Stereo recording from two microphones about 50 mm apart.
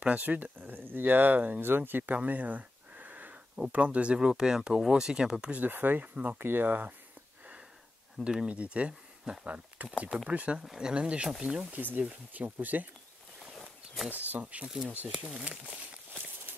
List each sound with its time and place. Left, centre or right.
0.0 s speech: right
5.6 s speech: right
8.2 s speech: centre
10.6 s speech: centre
10.9 s speech: right
11.7 s speech: right
12.0 s speech: right
14.1 s speech: right
14.4 s speech: right